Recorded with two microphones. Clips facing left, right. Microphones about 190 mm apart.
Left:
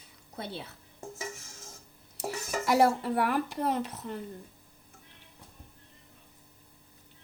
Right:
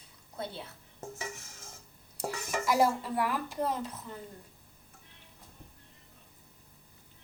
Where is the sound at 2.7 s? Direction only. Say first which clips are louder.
Left 3 dB; 65° left (ahead or behind).